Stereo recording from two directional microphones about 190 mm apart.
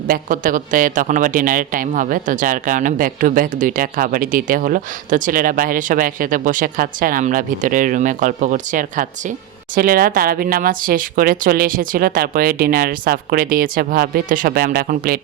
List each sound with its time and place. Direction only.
0.1 s a man's voice: 45° right (ahead or behind)